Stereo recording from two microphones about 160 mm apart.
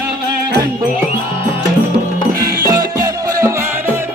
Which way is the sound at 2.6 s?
20° right (ahead or behind).